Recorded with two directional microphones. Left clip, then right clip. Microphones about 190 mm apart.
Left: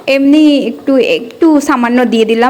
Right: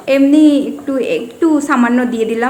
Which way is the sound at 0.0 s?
30° left (ahead or behind).